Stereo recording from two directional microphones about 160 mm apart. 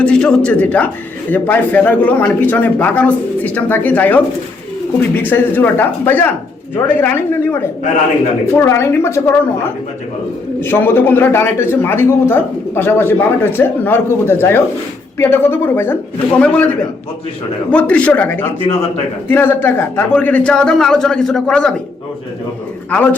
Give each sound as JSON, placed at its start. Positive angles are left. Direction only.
{"t": 0.0, "sound": "a man's voice", "side_deg": 5}
{"t": 5.3, "sound": "a man's voice", "side_deg": 10}
{"t": 10.6, "sound": "a man's voice", "side_deg": 15}
{"t": 17.7, "sound": "a man's voice", "side_deg": 5}